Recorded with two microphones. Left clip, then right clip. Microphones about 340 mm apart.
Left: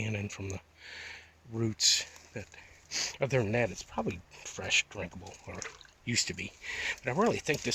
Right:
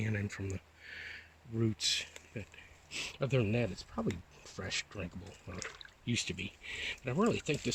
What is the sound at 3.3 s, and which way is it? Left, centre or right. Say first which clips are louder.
Speech: left 3 dB; left.